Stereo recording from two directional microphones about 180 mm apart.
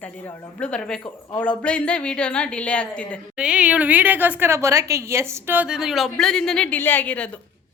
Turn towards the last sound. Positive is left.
turn(degrees=10)  # may be behind; listen again after turning